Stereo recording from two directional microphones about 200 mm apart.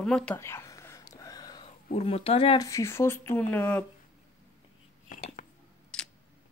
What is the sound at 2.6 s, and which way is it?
Speech, 15° left (ahead or behind).